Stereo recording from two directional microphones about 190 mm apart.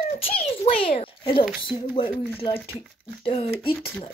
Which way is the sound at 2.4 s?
25° left (ahead or behind).